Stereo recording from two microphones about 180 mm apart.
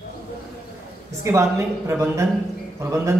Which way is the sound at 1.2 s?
15° right (ahead or behind).